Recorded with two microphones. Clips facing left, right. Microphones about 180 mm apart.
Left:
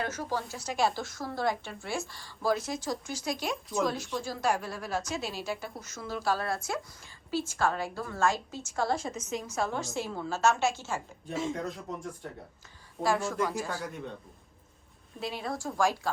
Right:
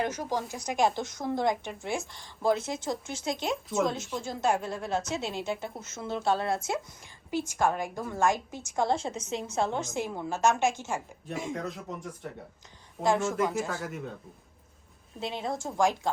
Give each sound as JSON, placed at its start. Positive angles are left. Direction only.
{"t": 0.0, "sound": "a woman's voice", "side_deg": -15}
{"t": 11.5, "sound": "speech", "side_deg": 0}
{"t": 13.0, "sound": "a woman's voice", "side_deg": -20}
{"t": 13.3, "sound": "speech", "side_deg": 0}
{"t": 15.2, "sound": "a woman's voice", "side_deg": -20}